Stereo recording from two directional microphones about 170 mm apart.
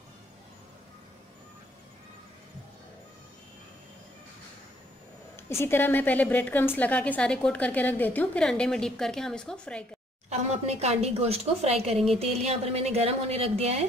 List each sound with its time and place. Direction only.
5.3 s a woman's voice: 15° left (ahead or behind)
10.3 s a woman's voice: 40° right (ahead or behind)